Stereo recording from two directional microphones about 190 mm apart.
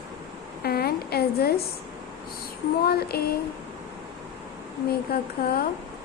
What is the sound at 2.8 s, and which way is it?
Speech, 55° left (ahead or behind).